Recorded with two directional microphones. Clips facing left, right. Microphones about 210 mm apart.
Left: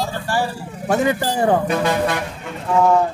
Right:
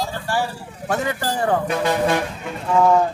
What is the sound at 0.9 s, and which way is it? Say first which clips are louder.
Speech: left 5 dB; 15° left (ahead or behind).